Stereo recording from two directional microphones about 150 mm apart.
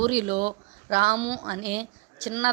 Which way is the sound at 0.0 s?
55° right (ahead or behind).